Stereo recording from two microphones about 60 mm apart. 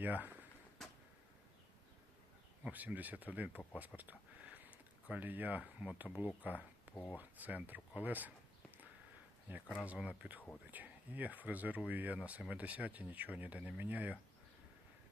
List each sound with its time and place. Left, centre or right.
0.0 s speech: right
0.8 s a sound: centre
2.6 s speech: right
9.5 s speech: right